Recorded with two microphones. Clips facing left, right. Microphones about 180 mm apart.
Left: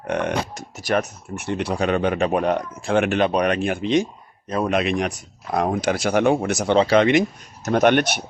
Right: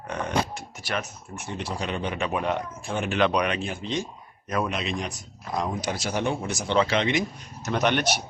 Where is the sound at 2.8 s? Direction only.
85° left.